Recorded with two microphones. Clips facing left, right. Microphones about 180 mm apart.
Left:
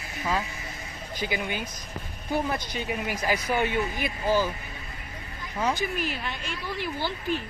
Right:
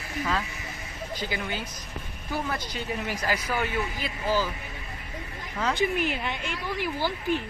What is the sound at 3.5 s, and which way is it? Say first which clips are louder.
Speech: left 3 dB; 20° left (ahead or behind).